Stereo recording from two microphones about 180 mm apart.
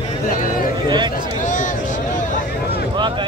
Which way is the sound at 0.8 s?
25° right (ahead or behind).